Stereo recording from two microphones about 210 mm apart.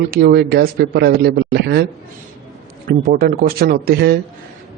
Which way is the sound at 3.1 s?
45° right (ahead or behind).